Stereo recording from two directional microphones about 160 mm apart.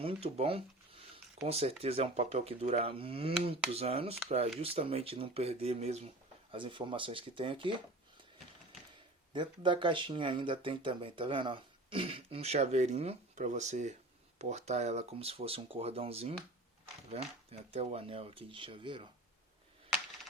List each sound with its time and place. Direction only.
0.0 s a sound: 40° right (ahead or behind)
1.4 s speech: 40° right (ahead or behind)
9.3 s speech: 30° right (ahead or behind)